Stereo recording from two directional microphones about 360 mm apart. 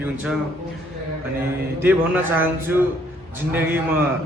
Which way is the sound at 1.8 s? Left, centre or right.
Centre.